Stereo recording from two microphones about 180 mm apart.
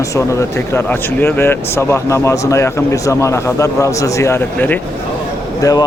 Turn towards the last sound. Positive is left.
turn(degrees=20)  # may be behind; listen again after turning